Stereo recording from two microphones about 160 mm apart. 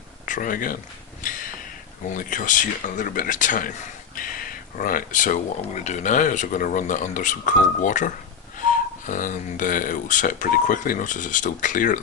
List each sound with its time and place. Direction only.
0.3 s speech: 60° left (ahead or behind)
1.2 s a sound: 55° left (ahead or behind)
2.0 s speech: 55° left (ahead or behind)